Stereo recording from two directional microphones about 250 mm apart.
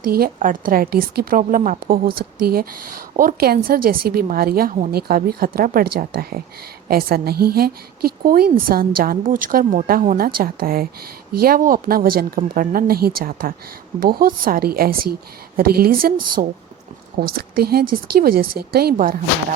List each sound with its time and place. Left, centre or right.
0.0 s a woman's voice: right